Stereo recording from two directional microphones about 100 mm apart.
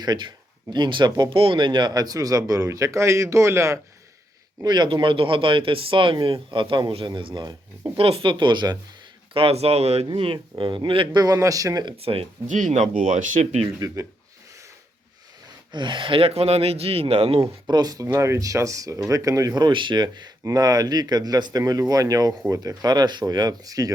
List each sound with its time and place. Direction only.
0.0 s speech: 45° right (ahead or behind); by 3.8 s 30° right (ahead or behind)
4.6 s speech: 45° right (ahead or behind)
7.9 s speech: 70° right (ahead or behind); by 8.8 s 45° right (ahead or behind)
9.3 s speech: 75° right (ahead or behind)
10.6 s speech: 55° right (ahead or behind)
11.2 s speech: 35° right (ahead or behind)
11.9 s speech: 75° right (ahead or behind)
13.4 s speech: 90° right
13.7 s speech: 30° right (ahead or behind)
15.7 s speech: 50° right (ahead or behind); by 17.4 s 85° right
17.4 s speech: 40° right (ahead or behind)